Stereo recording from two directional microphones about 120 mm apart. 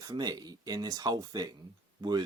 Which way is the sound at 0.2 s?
35° right (ahead or behind).